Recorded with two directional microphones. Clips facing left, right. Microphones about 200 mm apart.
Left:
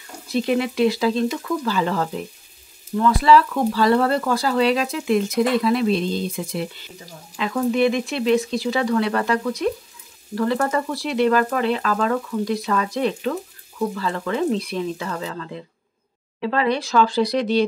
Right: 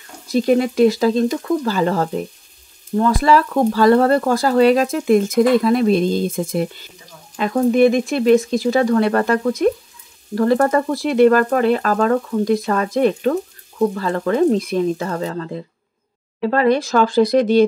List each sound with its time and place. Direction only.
0.3 s speech: 40° right (ahead or behind)